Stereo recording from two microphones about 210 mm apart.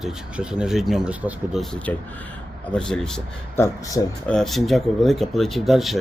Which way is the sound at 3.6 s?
15° left (ahead or behind).